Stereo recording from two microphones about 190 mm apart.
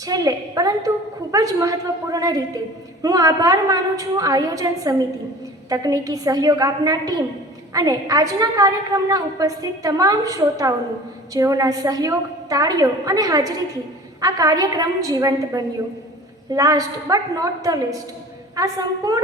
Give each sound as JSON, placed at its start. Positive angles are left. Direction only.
{"t": 0.0, "sound": "a woman's voice", "side_deg": -20}